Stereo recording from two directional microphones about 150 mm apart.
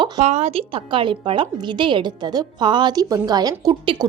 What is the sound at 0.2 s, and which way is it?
A woman's voice, 45° right (ahead or behind).